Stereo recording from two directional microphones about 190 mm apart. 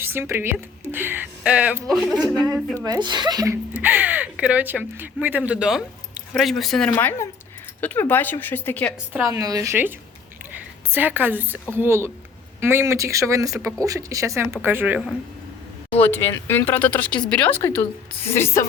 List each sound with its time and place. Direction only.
0.0 s a woman's voice: 10° right (ahead or behind)
2.8 s speech: 20° right (ahead or behind)
3.7 s speech: 10° right (ahead or behind)
6.9 s speech: 15° left (ahead or behind)
9.1 s a woman's voice: 15° right (ahead or behind)
15.9 s speech: 10° left (ahead or behind)